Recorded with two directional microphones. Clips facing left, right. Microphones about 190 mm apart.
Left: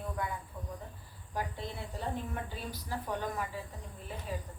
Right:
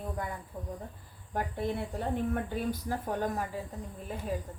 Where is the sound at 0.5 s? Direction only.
45° right (ahead or behind).